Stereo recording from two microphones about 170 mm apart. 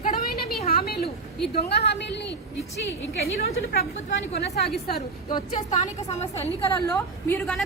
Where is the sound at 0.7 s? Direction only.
65° left (ahead or behind).